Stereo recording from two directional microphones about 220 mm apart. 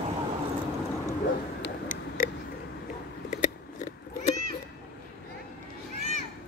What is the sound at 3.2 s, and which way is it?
Cat, 35° left (ahead or behind).